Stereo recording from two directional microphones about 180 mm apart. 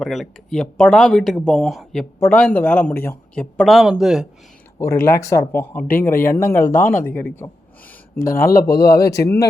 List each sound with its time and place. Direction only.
0.0 s speech: centre (ahead or behind)
4.8 s speech: 15° left (ahead or behind)
8.3 s speech: 55° left (ahead or behind)
8.5 s speech: 20° left (ahead or behind)